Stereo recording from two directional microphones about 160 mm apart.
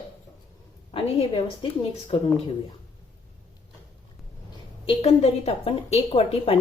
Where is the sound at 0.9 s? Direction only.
35° left (ahead or behind).